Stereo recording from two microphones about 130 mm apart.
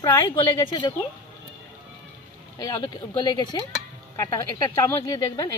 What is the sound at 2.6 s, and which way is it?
Speech, 30° left (ahead or behind).